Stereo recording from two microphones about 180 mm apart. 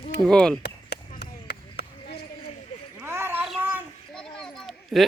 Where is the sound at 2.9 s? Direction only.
15° right (ahead or behind).